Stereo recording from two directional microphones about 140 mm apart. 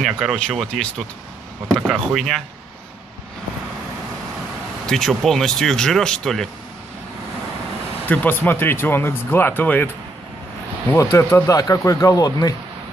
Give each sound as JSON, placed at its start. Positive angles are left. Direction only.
{"t": 0.0, "sound": "speech", "side_deg": 0}
{"t": 4.8, "sound": "speech", "side_deg": 0}
{"t": 8.1, "sound": "speech", "side_deg": 10}
{"t": 10.9, "sound": "speech", "side_deg": 20}